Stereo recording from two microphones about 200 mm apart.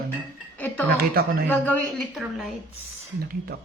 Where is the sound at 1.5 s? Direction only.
5° left (ahead or behind).